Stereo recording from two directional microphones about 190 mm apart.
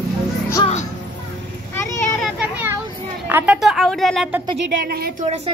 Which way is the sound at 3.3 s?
5° right (ahead or behind).